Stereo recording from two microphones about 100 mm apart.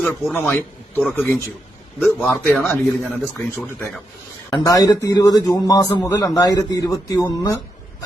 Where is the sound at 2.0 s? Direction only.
Centre (ahead or behind).